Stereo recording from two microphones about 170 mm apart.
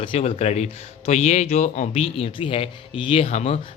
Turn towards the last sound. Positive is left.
turn(degrees=35)  # may be behind; listen again after turning